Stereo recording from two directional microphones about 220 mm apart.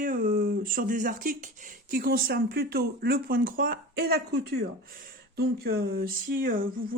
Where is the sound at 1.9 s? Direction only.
45° right (ahead or behind).